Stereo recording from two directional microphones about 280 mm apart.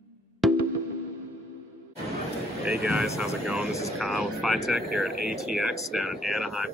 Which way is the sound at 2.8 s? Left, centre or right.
Centre.